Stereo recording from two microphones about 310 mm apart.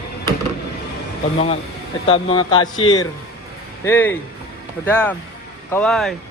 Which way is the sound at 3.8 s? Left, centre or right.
Centre.